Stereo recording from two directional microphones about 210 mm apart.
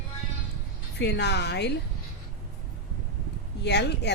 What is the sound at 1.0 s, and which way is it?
Speech, 55° left (ahead or behind).